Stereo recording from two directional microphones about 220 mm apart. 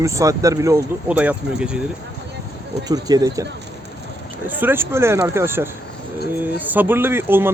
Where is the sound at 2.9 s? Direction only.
15° right (ahead or behind).